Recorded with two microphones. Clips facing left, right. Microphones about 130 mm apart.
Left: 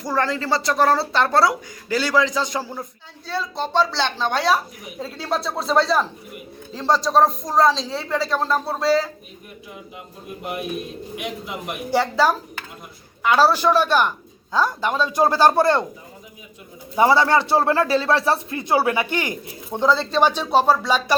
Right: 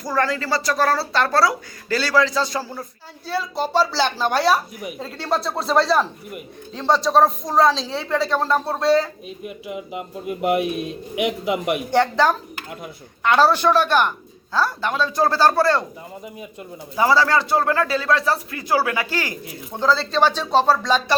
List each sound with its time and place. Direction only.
0.2 s speech: 20° left (ahead or behind)
3.2 s speech: centre (ahead or behind)
9.4 s speech: 90° right
11.9 s speech: 5° left (ahead or behind)
16.9 s speech: 25° left (ahead or behind)